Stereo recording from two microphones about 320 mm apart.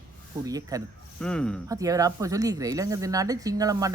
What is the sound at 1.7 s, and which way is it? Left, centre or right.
A man's voice, centre.